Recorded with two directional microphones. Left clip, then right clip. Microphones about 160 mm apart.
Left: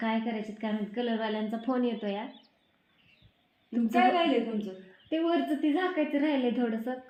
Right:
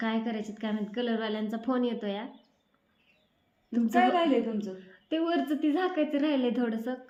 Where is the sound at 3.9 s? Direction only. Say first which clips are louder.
Even; 30° right (ahead or behind).